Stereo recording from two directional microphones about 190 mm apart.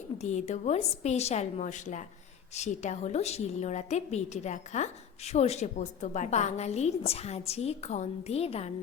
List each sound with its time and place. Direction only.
0.2 s a woman's voice: 35° left (ahead or behind)